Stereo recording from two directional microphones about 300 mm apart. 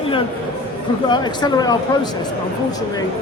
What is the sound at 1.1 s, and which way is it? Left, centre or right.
Speech, centre.